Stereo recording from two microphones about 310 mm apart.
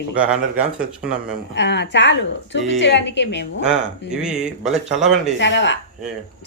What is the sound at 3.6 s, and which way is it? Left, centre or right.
Speech, centre.